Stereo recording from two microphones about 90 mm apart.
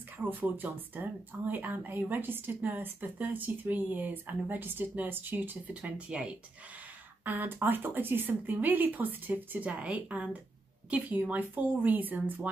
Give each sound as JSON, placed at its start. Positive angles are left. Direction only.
{"t": 0.2, "sound": "a woman's voice", "side_deg": -20}